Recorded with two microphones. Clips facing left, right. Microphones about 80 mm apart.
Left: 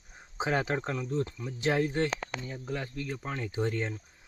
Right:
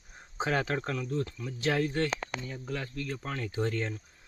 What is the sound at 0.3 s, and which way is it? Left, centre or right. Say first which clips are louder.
Speech: even; centre.